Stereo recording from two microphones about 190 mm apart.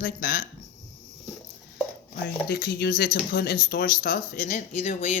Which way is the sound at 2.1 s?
60° left (ahead or behind).